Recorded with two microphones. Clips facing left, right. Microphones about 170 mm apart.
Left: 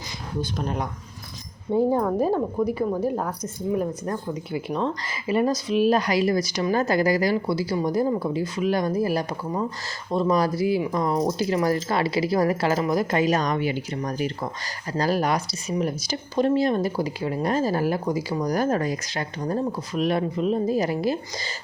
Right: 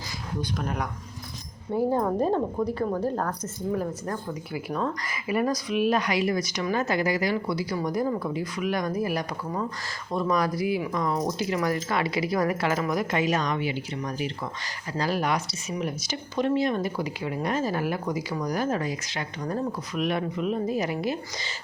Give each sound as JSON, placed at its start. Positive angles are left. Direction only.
{"t": 0.6, "sound": "a woman's voice", "side_deg": 25}
{"t": 2.0, "sound": "a woman's voice", "side_deg": -5}